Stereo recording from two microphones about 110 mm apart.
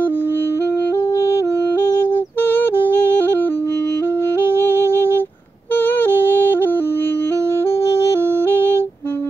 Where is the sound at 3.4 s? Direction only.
20° left (ahead or behind).